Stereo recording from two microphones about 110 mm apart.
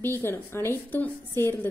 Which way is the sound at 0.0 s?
20° left (ahead or behind).